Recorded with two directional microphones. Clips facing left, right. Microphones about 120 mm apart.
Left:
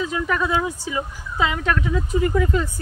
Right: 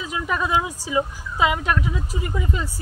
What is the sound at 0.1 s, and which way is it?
Speech, 20° right (ahead or behind).